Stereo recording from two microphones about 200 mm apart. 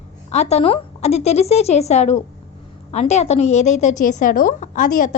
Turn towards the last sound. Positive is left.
turn(degrees=40)  # may be behind; listen again after turning